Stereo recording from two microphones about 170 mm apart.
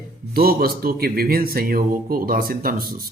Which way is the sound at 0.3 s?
60° right (ahead or behind).